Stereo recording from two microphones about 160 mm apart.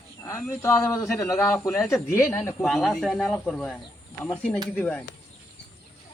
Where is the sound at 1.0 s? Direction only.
Centre (ahead or behind).